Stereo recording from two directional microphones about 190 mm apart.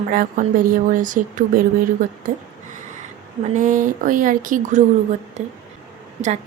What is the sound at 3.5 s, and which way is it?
Speech, 45° right (ahead or behind).